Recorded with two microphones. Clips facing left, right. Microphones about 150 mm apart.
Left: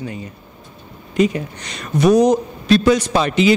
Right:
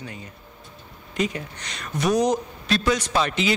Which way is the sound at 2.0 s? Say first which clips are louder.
Left 8 dB; 55° left (ahead or behind).